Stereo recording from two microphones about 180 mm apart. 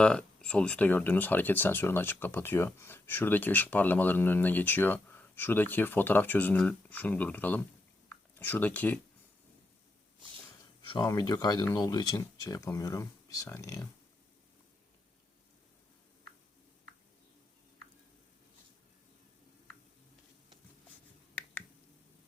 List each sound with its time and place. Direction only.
0.0 s speech: 5° left (ahead or behind)
10.8 s speech: 20° left (ahead or behind)